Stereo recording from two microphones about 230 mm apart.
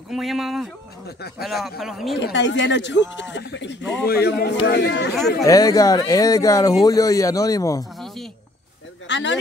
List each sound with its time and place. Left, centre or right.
0.1 s speech: centre
2.1 s speech: left
5.4 s speech: centre
9.0 s speech: left